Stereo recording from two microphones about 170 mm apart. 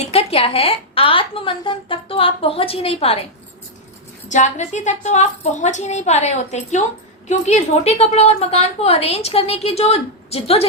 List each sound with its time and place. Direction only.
0.1 s a woman's voice: 35° left (ahead or behind)
4.3 s a woman's voice: 45° left (ahead or behind)